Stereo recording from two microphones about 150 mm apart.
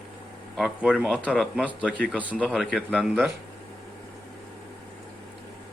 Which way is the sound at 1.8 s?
10° left (ahead or behind).